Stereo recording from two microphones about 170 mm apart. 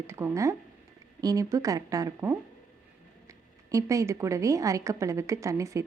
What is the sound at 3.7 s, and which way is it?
A woman's voice, 20° right (ahead or behind).